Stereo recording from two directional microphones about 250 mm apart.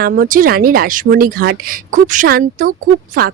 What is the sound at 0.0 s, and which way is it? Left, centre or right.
A woman's voice, right.